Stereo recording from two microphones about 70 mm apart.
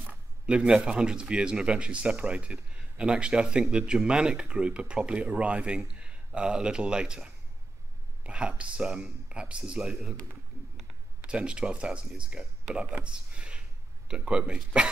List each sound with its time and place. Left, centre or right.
0.0 s speech: centre
11.2 s speech: centre